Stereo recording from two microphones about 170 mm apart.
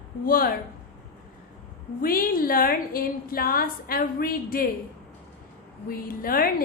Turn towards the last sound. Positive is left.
turn(degrees=60)  # may be behind; listen again after turning